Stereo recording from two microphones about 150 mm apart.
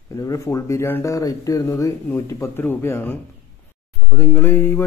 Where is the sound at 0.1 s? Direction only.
20° left (ahead or behind).